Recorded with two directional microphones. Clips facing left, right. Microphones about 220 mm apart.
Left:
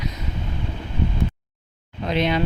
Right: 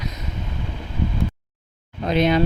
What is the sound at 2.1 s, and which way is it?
Speech, 45° right (ahead or behind).